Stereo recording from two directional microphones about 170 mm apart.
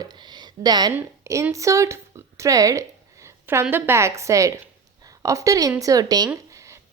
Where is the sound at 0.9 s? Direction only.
15° right (ahead or behind).